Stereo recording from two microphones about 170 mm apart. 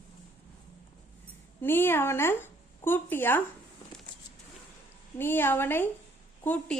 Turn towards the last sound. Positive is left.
turn(degrees=10)  # may be behind; listen again after turning